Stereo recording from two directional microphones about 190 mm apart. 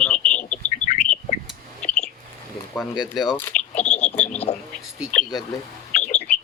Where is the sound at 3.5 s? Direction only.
40° left (ahead or behind).